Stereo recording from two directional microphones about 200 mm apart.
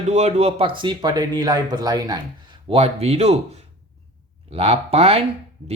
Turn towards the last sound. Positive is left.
turn(degrees=-30)  # may be behind; listen again after turning